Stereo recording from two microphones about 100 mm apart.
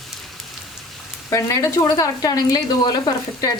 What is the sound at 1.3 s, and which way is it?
A woman's voice, 30° left (ahead or behind).